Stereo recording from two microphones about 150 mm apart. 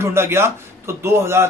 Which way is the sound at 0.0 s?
15° right (ahead or behind).